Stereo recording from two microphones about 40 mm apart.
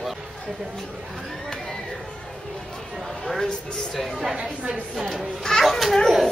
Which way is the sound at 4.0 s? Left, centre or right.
Centre.